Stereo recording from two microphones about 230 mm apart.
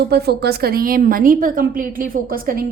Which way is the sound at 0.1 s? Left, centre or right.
Right.